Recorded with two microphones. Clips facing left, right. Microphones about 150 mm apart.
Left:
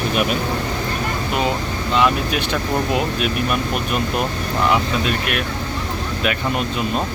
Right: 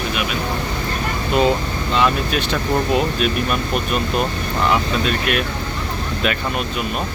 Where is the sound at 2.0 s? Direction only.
10° left (ahead or behind).